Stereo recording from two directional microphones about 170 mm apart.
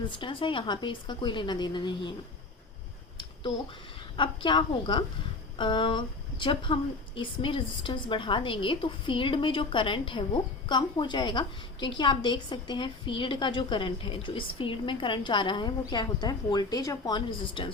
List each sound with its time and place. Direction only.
0.0 s a woman's voice: 30° left (ahead or behind)
4.2 s a woman's voice: 30° left (ahead or behind)